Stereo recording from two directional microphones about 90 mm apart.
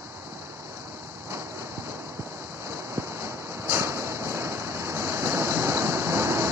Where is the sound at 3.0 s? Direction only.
30° right (ahead or behind).